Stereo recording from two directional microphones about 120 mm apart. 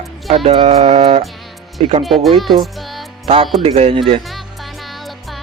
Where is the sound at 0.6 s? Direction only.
70° right (ahead or behind).